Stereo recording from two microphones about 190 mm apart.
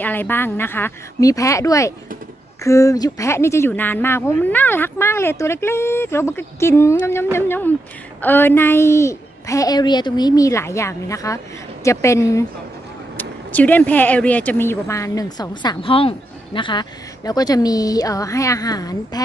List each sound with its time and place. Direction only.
0.0 s speech: 10° left (ahead or behind)